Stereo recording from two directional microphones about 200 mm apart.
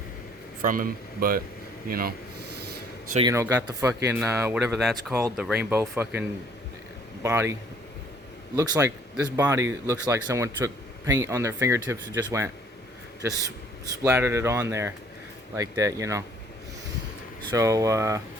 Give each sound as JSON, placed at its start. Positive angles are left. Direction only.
{"t": 0.6, "sound": "speech", "side_deg": -45}
{"t": 3.2, "sound": "a man's voice", "side_deg": -15}
{"t": 8.5, "sound": "a man's voice", "side_deg": -15}
{"t": 14.0, "sound": "a man's voice", "side_deg": -10}
{"t": 17.5, "sound": "a man's voice", "side_deg": -15}